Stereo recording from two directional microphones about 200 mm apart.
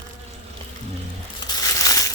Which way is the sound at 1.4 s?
20° left (ahead or behind).